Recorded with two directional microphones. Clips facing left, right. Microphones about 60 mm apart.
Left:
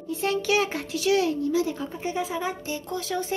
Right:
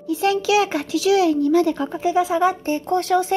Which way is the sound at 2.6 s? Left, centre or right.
Right.